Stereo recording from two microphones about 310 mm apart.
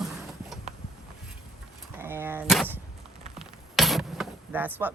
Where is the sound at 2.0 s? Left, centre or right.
Centre.